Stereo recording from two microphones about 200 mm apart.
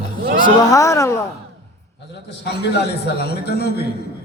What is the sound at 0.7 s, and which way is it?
Speech, 15° left (ahead or behind).